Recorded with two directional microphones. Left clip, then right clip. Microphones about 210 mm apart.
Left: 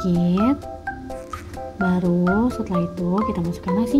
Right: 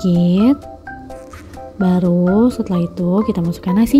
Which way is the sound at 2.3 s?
30° right (ahead or behind).